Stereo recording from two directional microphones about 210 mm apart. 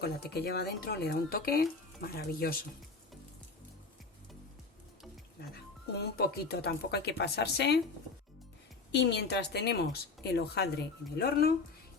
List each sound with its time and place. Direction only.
0.0 s speech: 50° left (ahead or behind)
6.0 s speech: 50° left (ahead or behind)
8.9 s speech: 55° left (ahead or behind)